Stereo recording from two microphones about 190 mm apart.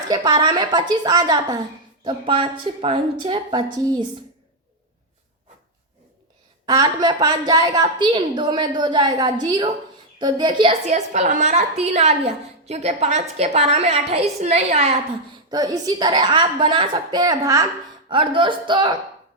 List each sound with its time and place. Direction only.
0.1 s a woman's voice: 20° right (ahead or behind)
6.7 s a woman's voice: 20° right (ahead or behind)
15.4 s a woman's voice: 20° right (ahead or behind)